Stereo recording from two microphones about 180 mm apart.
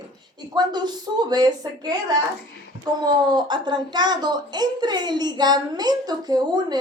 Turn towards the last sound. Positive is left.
turn(degrees=-25)  # may be behind; listen again after turning